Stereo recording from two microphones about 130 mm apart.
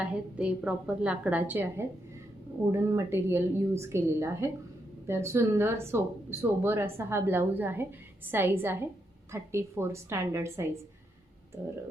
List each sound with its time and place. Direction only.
0.0 s a woman's voice: 10° right (ahead or behind)